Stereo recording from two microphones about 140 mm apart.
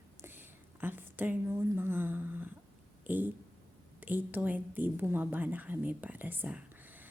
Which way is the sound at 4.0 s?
10° right (ahead or behind).